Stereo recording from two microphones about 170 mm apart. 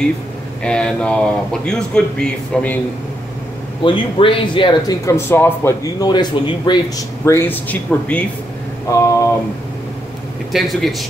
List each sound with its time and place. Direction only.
0.7 s a man's voice: 5° left (ahead or behind)
3.8 s speech: 30° left (ahead or behind); by 8.3 s 10° left (ahead or behind)
8.8 s a sound: 20° left (ahead or behind)
10.5 s a man's voice: centre (ahead or behind)